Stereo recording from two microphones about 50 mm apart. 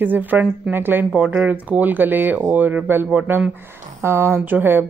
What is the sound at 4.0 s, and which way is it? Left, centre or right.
Speech, right.